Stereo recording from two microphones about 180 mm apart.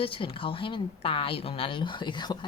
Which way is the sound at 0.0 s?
30° left (ahead or behind).